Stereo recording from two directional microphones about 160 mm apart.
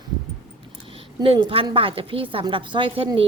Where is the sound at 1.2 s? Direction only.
30° right (ahead or behind).